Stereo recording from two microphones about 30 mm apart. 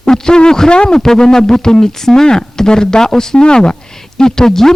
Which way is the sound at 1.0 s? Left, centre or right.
Centre.